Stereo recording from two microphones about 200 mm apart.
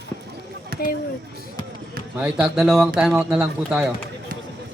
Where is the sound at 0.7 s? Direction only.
50° right (ahead or behind).